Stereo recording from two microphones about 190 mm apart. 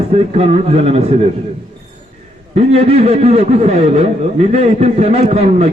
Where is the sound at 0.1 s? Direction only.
30° right (ahead or behind).